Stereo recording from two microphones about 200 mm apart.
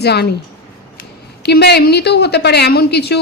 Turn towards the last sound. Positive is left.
turn(degrees=55)  # may be behind; listen again after turning